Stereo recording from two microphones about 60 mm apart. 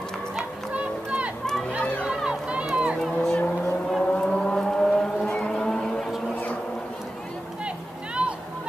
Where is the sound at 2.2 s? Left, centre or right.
Centre.